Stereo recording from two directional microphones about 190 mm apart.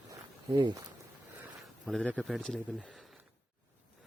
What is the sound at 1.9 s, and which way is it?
Speech, 5° left (ahead or behind).